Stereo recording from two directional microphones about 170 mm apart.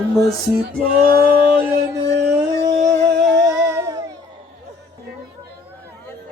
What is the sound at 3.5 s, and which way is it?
Music, 15° right (ahead or behind).